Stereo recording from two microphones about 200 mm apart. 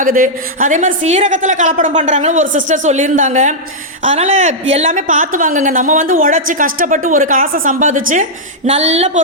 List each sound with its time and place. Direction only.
0.0 s a woman's voice: 40° right (ahead or behind)
4.9 s a woman's voice: 40° right (ahead or behind)